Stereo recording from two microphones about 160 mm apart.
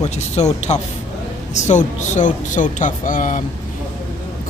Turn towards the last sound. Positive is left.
turn(degrees=55)  # may be behind; listen again after turning